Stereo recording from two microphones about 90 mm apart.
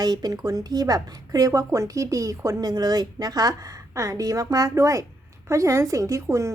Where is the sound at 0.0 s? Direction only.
45° right (ahead or behind).